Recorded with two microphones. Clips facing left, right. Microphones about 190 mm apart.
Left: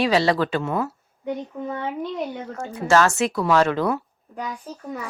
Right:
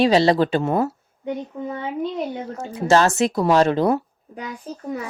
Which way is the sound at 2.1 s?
20° right (ahead or behind).